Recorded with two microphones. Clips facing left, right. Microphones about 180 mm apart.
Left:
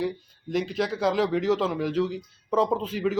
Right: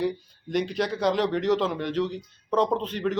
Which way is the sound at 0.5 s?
Centre (ahead or behind).